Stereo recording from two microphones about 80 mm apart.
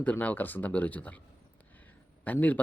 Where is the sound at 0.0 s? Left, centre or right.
Centre.